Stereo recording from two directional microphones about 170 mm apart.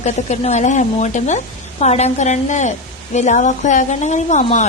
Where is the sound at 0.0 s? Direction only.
40° left (ahead or behind).